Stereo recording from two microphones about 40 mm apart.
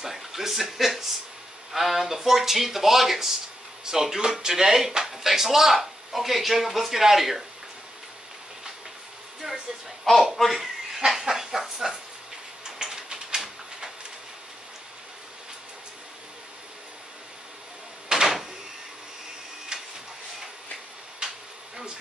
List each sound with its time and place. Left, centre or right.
0.0 s speech: centre
9.4 s music: centre
10.1 s speech: centre
11.1 s a sound: centre
18.0 s door: centre
19.7 s printer: centre
21.2 s a sound: centre